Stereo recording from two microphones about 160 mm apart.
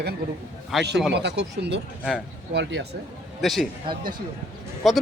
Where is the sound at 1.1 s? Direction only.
90° right.